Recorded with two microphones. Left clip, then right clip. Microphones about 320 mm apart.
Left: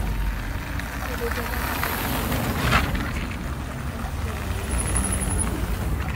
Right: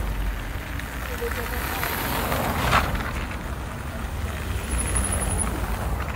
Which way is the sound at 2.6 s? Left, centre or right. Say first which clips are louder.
Even; right.